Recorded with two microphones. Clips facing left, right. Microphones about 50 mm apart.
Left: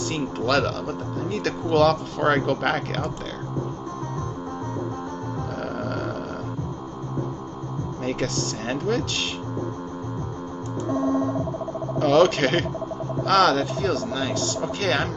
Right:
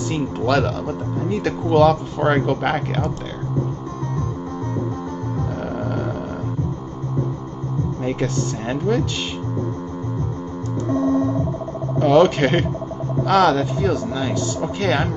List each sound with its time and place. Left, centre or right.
0.1 s speech: centre
8.0 s speech: centre
10.9 s music: right
12.0 s speech: centre